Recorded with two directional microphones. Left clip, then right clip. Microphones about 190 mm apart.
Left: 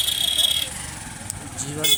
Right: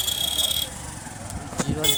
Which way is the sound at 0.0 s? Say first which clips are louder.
Left 4 dB; 50° right (ahead or behind).